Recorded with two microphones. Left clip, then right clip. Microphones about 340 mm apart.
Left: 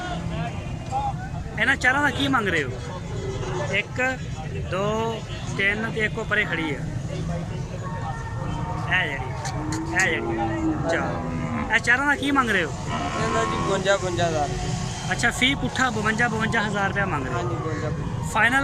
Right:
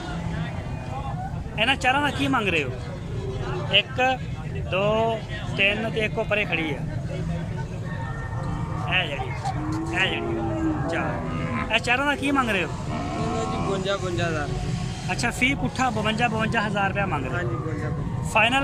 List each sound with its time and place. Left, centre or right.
1.5 s speech: centre
3.7 s speech: centre
8.9 s speech: centre
11.7 s speech: centre
13.1 s vehicle: left
15.1 s speech: centre
18.3 s speech: centre